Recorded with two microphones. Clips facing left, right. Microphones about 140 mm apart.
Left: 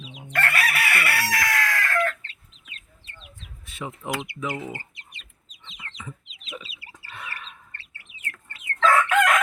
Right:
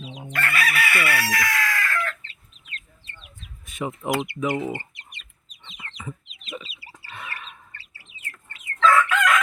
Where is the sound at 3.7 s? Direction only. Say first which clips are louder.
Right 5 dB; 15° right (ahead or behind).